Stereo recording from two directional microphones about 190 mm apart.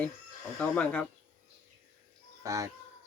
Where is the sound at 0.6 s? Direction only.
5° left (ahead or behind).